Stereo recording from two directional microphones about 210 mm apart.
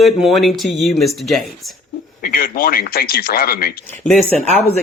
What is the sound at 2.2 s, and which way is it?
Speech, 40° left (ahead or behind).